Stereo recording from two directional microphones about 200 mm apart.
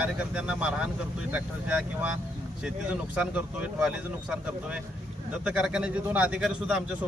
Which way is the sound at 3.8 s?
5° right (ahead or behind).